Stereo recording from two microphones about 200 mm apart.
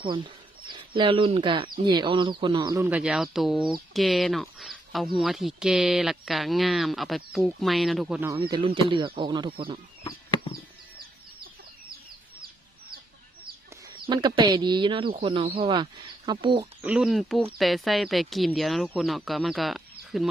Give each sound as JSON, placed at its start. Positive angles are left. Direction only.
{"t": 0.7, "sound": "speech", "side_deg": -25}
{"t": 8.3, "sound": "speech", "side_deg": -20}
{"t": 14.1, "sound": "speech", "side_deg": -20}
{"t": 16.8, "sound": "speech", "side_deg": -5}